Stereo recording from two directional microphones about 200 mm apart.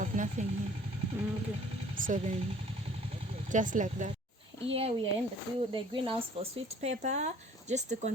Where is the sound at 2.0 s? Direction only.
40° right (ahead or behind).